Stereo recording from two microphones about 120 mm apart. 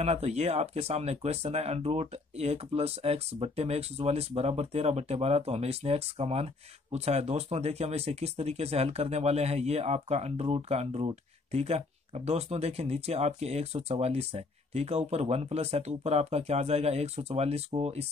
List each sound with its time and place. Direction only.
0.0 s speech: 60° right (ahead or behind)